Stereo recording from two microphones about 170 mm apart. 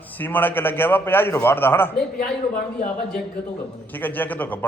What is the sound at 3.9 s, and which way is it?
Speech, 10° left (ahead or behind).